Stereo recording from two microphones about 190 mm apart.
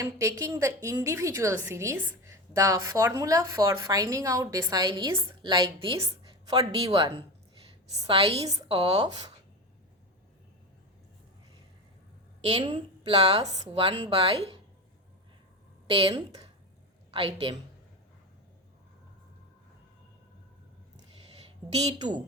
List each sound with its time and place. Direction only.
0.0 s a woman's voice: 15° right (ahead or behind)
12.4 s a woman's voice: 25° right (ahead or behind)
15.9 s speech: 30° right (ahead or behind)
21.9 s speech: 25° right (ahead or behind)